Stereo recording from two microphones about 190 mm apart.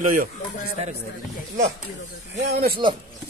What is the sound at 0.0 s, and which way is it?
Speech, 45° right (ahead or behind).